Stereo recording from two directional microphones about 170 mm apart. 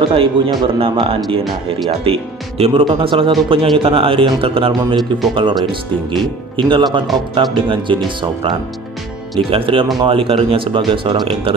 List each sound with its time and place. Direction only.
0.0 s speech: 30° right (ahead or behind)
9.5 s speech: 30° right (ahead or behind)